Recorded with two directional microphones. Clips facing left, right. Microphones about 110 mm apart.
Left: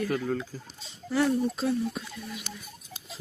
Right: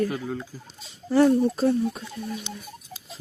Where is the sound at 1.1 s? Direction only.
25° right (ahead or behind).